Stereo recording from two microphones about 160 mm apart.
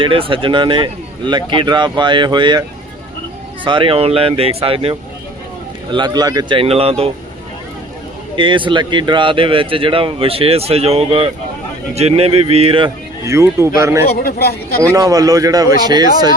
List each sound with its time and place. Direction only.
0.0 s speech: 35° right (ahead or behind)
8.4 s speech: 30° right (ahead or behind)
13.2 s speech: 20° right (ahead or behind)
14.0 s speech: 75° left (ahead or behind)
14.9 s speech: 20° right (ahead or behind)